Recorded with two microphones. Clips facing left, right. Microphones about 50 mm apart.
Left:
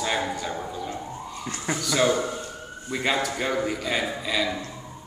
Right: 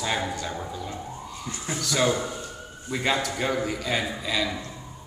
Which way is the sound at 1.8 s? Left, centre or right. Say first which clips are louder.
Left 1 dB; centre.